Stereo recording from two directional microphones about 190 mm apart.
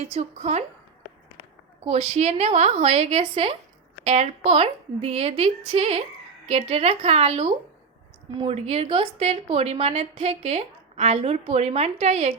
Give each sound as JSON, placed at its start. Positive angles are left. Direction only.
{"t": 0.0, "sound": "a woman's voice", "side_deg": -35}
{"t": 1.9, "sound": "a woman's voice", "side_deg": -35}